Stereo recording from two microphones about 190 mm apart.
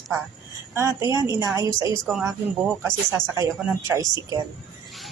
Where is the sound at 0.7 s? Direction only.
15° right (ahead or behind).